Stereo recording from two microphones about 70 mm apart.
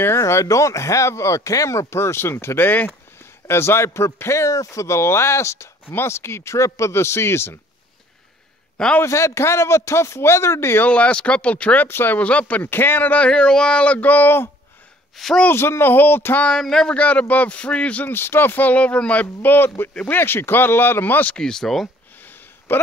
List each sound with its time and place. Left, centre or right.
0.2 s speech: left
9.0 s speech: left
10.8 s speech: centre
11.9 s speech: left
12.2 s speech: centre
15.1 s speech: centre
15.4 s speech: left
16.4 s speech: centre
17.0 s speech: left
18.1 s speech: left
19.2 s speech: left
21.4 s speech: centre
22.2 s a sound: left